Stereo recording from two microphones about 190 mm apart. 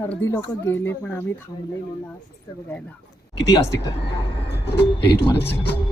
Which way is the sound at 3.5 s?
15° left (ahead or behind).